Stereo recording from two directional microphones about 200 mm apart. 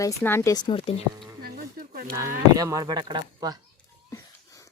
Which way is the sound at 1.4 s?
50° right (ahead or behind).